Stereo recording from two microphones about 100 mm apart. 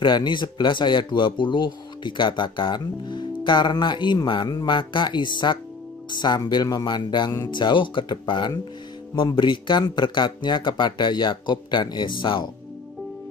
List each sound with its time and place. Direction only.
0.0 s speech: 50° left (ahead or behind)